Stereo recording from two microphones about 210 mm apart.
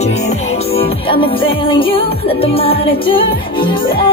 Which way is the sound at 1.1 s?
25° left (ahead or behind).